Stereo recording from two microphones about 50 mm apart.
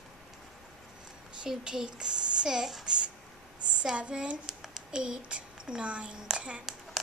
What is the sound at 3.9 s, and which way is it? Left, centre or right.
Speech, right.